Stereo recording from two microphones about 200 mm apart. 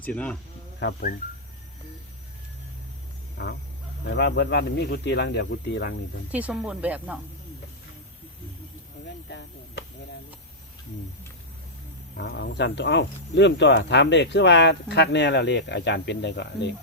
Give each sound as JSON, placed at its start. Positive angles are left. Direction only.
{"t": 0.0, "sound": "speech", "side_deg": 5}
{"t": 0.8, "sound": "speech", "side_deg": 65}
{"t": 3.3, "sound": "a sound", "side_deg": 55}
{"t": 4.0, "sound": "speech", "side_deg": 60}
{"t": 6.3, "sound": "speech", "side_deg": -5}
{"t": 12.1, "sound": "speech", "side_deg": 60}